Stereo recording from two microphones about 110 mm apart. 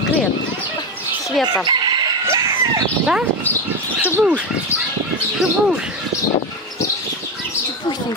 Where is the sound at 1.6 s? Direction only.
45° right (ahead or behind).